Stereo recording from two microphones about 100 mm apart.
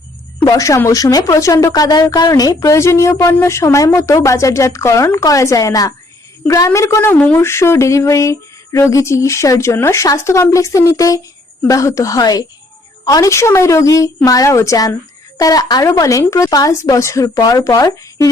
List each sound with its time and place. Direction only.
0.4 s speech: 35° left (ahead or behind)